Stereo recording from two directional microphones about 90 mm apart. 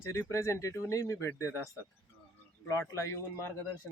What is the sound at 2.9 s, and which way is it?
Speech, 30° left (ahead or behind).